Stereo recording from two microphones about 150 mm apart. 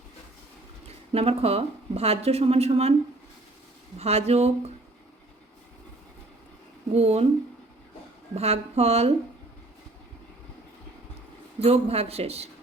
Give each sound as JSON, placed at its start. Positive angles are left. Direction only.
{"t": 0.9, "sound": "speech", "side_deg": -40}
{"t": 3.9, "sound": "speech", "side_deg": -45}
{"t": 6.9, "sound": "speech", "side_deg": -45}
{"t": 8.4, "sound": "speech", "side_deg": -45}
{"t": 11.6, "sound": "speech", "side_deg": -45}